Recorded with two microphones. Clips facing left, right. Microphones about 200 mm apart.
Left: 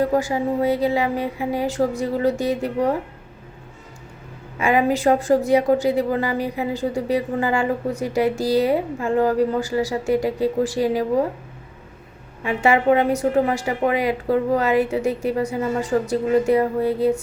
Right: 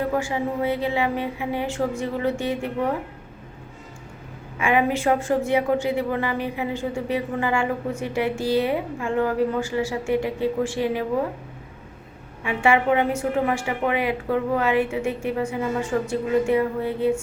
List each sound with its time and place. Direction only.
0.0 s a woman's voice: 40° left (ahead or behind)
4.5 s a woman's voice: 40° left (ahead or behind)
12.4 s a woman's voice: 40° left (ahead or behind)